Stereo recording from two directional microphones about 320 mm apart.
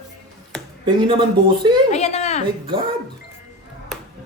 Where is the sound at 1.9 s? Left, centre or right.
Left.